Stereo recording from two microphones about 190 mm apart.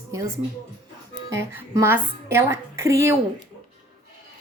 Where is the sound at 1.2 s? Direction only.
15° right (ahead or behind).